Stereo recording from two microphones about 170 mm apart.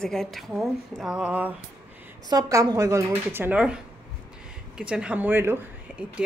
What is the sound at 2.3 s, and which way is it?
A woman's voice, 20° right (ahead or behind).